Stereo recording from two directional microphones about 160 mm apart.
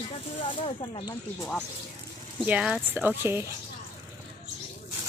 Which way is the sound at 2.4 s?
5° right (ahead or behind).